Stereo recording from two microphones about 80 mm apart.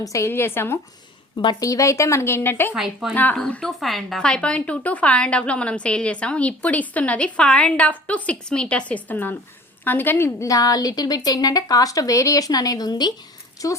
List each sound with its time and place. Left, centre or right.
0.0 s speech: left
0.3 s a woman's voice: left
1.5 s a woman's voice: left
2.7 s speech: centre
3.3 s a woman's voice: centre; by 10.5 s left
10.5 s speech: left
13.6 s speech: left